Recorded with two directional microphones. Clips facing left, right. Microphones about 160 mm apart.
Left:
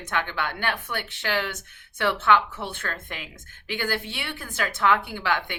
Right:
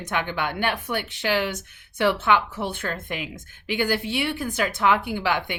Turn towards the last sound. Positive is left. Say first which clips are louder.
# right 3 dB
turn(degrees=-15)  # may be behind; listen again after turning